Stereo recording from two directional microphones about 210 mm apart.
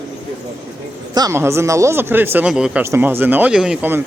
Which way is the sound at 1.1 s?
15° right (ahead or behind).